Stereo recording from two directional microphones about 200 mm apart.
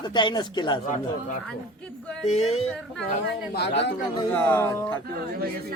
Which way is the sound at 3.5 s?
60° left (ahead or behind).